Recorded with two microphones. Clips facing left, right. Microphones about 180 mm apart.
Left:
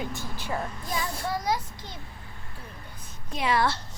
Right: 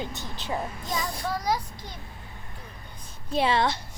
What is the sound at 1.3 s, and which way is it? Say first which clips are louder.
Speech: right 1 dB; 25° left (ahead or behind).